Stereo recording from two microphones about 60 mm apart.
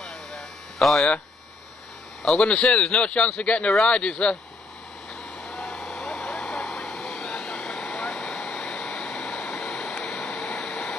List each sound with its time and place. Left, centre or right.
0.0 s a sound: centre
2.2 s speech: centre
5.4 s vehicle: centre